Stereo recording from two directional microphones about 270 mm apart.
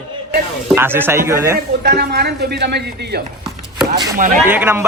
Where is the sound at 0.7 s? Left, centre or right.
Centre.